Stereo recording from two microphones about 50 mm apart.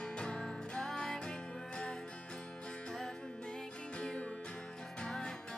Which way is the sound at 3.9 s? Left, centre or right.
Centre.